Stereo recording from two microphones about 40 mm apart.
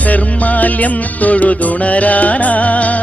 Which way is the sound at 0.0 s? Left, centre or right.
Left.